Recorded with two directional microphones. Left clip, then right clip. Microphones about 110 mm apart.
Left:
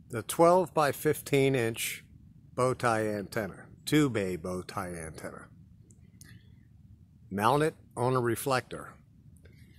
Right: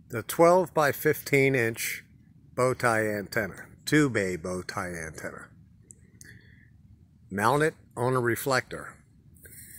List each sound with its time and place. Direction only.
0.1 s speech: 20° right (ahead or behind)
7.3 s speech: 15° right (ahead or behind)